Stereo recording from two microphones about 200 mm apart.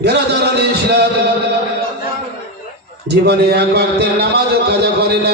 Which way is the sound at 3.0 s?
55° right (ahead or behind).